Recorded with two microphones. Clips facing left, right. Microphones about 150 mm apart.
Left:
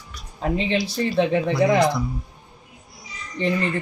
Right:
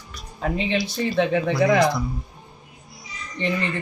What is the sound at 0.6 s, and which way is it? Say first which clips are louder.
Speech: even; 35° left (ahead or behind).